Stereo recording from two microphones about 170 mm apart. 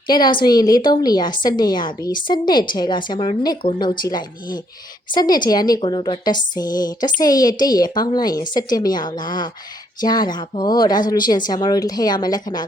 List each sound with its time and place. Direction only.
0.1 s a woman's voice: 25° left (ahead or behind)